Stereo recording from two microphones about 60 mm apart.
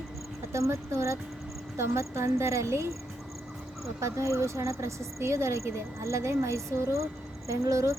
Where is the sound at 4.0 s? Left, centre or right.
Right.